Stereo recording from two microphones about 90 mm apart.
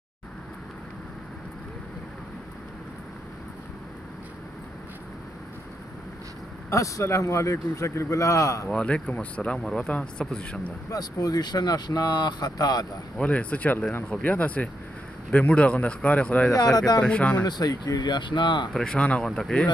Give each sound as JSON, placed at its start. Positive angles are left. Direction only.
{"t": 6.7, "sound": "a man's voice", "side_deg": 35}
{"t": 8.6, "sound": "speech", "side_deg": 10}
{"t": 10.9, "sound": "speech", "side_deg": 45}
{"t": 13.2, "sound": "speech", "side_deg": 15}
{"t": 16.7, "sound": "speech", "side_deg": 45}
{"t": 17.0, "sound": "speech", "side_deg": 15}
{"t": 17.5, "sound": "speech", "side_deg": 45}
{"t": 18.7, "sound": "speech", "side_deg": 10}